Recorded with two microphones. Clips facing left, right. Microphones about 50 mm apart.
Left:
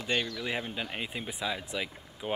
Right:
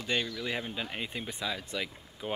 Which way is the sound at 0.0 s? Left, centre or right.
Centre.